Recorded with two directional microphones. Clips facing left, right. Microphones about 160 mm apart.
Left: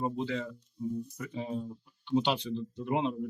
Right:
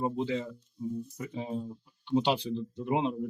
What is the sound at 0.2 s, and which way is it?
Speech, 20° right (ahead or behind).